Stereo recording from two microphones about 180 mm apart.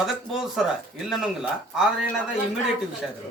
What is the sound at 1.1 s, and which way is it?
Speech, centre (ahead or behind).